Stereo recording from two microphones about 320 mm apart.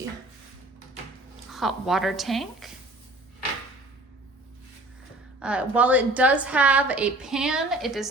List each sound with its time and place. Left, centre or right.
1.5 s a woman's voice: centre
5.4 s a woman's voice: centre